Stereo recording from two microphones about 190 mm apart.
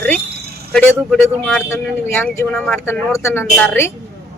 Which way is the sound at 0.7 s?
5° left (ahead or behind).